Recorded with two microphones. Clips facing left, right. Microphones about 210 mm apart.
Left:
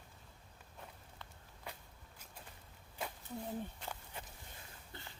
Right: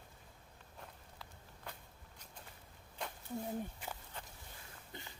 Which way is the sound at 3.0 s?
5° left (ahead or behind).